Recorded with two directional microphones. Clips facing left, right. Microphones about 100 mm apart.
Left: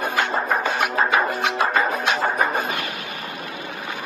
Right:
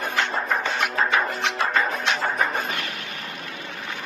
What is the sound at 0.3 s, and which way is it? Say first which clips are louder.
Music: left 3 dB; 30° left (ahead or behind).